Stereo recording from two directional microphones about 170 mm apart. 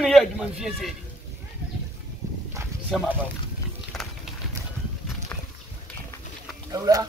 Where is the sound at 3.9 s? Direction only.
Centre (ahead or behind).